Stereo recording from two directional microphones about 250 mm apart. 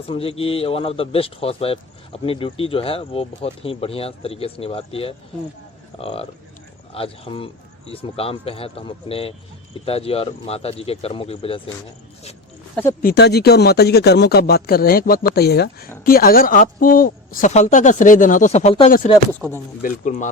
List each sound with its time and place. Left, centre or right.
0.1 s speech: left
13.0 s speech: left